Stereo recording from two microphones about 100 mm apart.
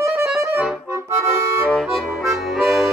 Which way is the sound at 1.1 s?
25° right (ahead or behind).